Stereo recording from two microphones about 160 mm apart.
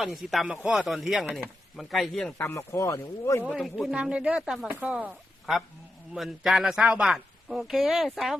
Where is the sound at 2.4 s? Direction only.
20° left (ahead or behind).